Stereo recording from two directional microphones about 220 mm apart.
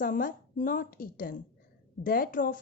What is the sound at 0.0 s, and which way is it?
Speech, 40° left (ahead or behind).